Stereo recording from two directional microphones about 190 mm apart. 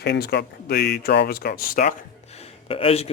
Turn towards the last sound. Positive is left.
turn(degrees=30)  # may be behind; listen again after turning